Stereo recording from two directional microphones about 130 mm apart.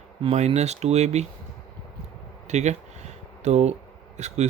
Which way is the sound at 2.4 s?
60° right (ahead or behind).